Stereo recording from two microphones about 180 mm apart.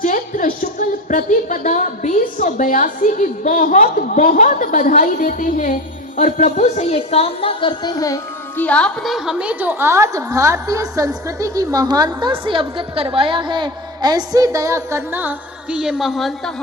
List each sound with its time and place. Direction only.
0.0 s speech: 45° left (ahead or behind); by 8.6 s 20° left (ahead or behind)
8.6 s a woman's voice: 5° left (ahead or behind)